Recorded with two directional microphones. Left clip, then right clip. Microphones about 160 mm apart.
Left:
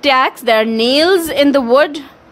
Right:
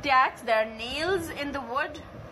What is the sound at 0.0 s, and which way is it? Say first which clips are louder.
A woman's voice: left 11 dB; 65° left (ahead or behind).